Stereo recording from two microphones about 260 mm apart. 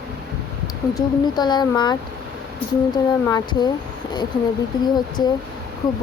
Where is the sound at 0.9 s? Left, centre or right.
Centre.